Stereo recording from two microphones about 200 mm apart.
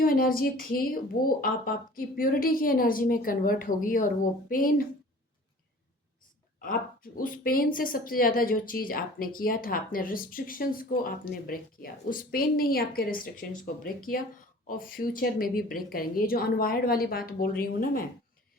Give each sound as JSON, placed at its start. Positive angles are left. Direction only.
{"t": 0.0, "sound": "speech", "side_deg": 45}
{"t": 7.2, "sound": "speech", "side_deg": 45}